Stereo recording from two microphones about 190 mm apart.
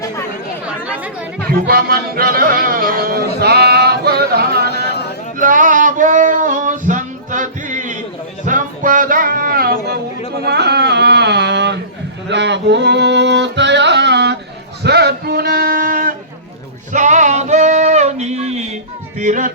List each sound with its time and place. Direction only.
1.5 s music: 55° right (ahead or behind)
5.4 s music: 45° right (ahead or behind)
10.4 s a sound: 60° right (ahead or behind)
12.3 s music: 65° right (ahead or behind)
14.8 s a sound: 60° right (ahead or behind)
16.9 s male singing: 40° right (ahead or behind)
19.2 s music: 40° right (ahead or behind)